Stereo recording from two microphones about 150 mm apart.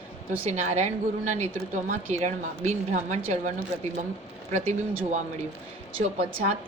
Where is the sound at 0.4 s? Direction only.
50° right (ahead or behind).